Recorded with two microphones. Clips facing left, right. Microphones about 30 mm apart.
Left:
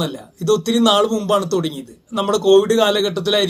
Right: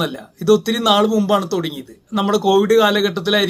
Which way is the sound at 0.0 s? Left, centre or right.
Centre.